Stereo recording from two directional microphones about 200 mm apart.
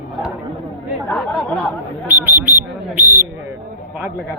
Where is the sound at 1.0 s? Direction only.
5° left (ahead or behind).